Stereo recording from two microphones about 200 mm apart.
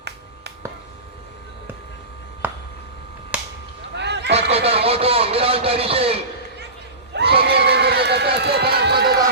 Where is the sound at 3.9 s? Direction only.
60° right (ahead or behind).